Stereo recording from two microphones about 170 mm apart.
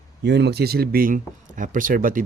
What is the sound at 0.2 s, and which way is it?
Speech, 90° right.